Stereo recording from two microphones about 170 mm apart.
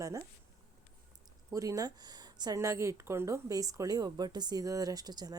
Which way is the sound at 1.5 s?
20° right (ahead or behind).